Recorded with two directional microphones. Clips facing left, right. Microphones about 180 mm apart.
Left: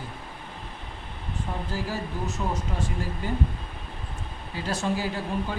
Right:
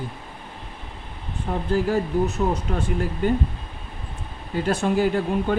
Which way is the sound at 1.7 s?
60° right (ahead or behind).